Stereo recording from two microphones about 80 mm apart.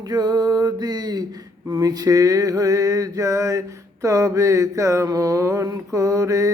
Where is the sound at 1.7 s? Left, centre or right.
Right.